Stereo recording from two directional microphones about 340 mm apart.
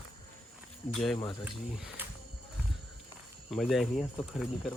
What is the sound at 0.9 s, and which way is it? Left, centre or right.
Speech, centre.